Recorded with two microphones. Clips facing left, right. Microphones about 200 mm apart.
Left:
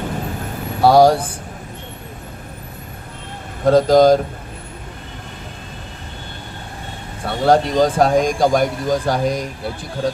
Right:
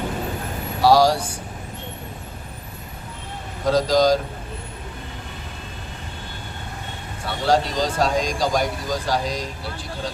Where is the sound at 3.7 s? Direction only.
55° left (ahead or behind).